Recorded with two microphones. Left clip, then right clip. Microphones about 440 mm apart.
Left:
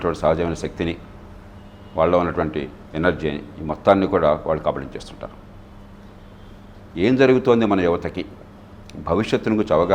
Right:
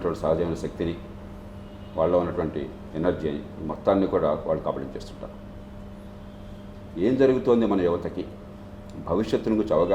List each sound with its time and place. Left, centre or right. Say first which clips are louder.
0.0 s a man's voice: left 5 dB; left
2.0 s a man's voice: left 5 dB; left
6.9 s a man's voice: left 5 dB; left